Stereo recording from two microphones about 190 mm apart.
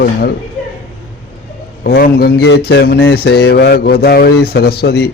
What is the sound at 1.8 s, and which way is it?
Speech, 55° left (ahead or behind).